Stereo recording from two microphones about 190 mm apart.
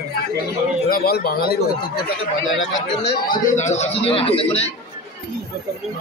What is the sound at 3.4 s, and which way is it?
A man's voice, 40° left (ahead or behind).